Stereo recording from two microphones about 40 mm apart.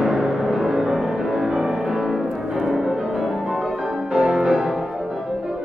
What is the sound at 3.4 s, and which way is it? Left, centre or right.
Music, centre.